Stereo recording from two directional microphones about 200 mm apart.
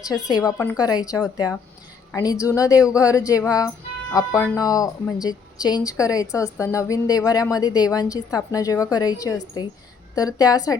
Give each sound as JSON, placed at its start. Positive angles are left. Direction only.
{"t": 0.3, "sound": "speech", "side_deg": 20}